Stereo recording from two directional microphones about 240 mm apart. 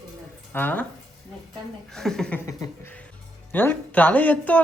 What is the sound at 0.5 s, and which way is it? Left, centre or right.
Speech, centre.